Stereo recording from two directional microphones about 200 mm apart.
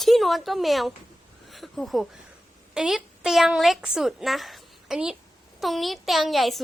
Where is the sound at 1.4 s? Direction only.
Centre (ahead or behind).